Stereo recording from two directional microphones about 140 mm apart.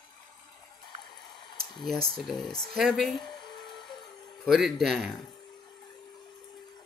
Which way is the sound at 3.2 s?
30° left (ahead or behind).